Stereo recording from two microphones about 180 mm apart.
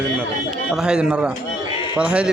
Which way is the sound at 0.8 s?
5° right (ahead or behind).